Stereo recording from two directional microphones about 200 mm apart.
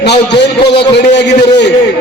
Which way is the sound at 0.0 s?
55° left (ahead or behind).